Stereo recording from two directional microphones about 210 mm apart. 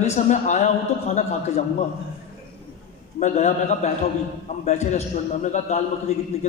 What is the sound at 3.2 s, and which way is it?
A man's voice, 35° left (ahead or behind).